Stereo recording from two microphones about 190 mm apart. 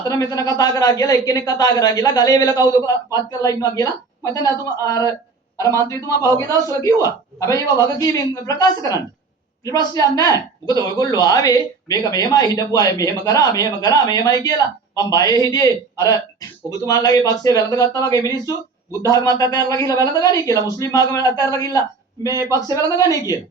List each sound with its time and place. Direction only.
0.1 s a man's voice: 20° left (ahead or behind)